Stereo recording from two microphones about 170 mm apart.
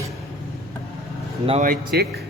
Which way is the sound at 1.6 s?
70° right (ahead or behind).